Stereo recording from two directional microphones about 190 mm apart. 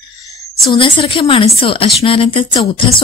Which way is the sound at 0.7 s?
25° left (ahead or behind).